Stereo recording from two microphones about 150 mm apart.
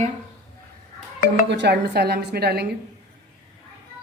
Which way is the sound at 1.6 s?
90° right.